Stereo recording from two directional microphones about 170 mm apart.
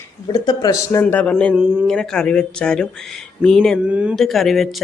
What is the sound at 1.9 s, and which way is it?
Speech, 5° left (ahead or behind).